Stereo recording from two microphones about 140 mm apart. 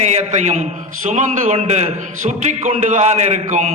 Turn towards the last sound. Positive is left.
turn(degrees=-55)  # may be behind; listen again after turning